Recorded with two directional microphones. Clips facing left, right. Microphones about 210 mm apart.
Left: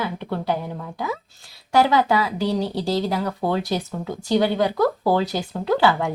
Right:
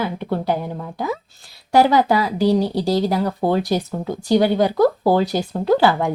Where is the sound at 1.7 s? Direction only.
35° right (ahead or behind).